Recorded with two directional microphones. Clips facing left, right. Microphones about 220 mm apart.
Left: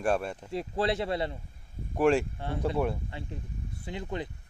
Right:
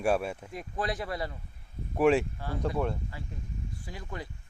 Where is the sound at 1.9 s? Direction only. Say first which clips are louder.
Even; 5° right (ahead or behind).